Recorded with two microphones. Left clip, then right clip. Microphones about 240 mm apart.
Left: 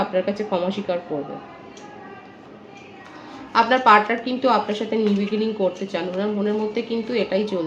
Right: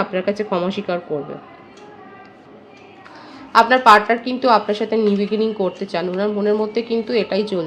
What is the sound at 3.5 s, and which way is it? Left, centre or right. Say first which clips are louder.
A woman's voice: right 4 dB; right.